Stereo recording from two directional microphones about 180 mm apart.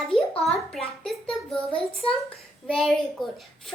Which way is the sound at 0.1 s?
Centre (ahead or behind).